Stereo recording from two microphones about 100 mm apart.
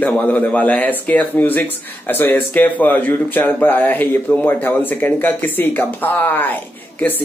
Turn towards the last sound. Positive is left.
turn(degrees=20)  # may be behind; listen again after turning